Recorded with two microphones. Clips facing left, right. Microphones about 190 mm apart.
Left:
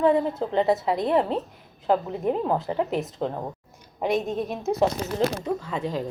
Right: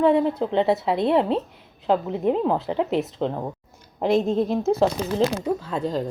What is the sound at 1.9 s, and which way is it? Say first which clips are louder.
Speech: right 2 dB; 20° right (ahead or behind).